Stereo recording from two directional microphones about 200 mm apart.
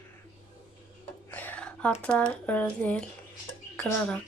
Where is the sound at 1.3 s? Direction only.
10° left (ahead or behind).